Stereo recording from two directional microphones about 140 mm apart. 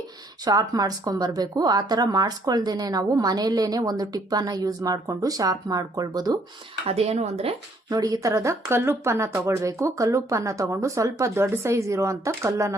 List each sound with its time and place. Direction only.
0.4 s speech: 25° right (ahead or behind)
6.8 s speech: 45° right (ahead or behind)
7.9 s speech: 25° right (ahead or behind)